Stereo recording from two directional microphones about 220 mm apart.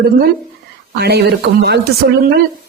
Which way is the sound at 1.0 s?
50° right (ahead or behind).